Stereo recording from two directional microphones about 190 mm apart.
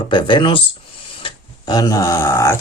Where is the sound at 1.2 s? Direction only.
20° left (ahead or behind).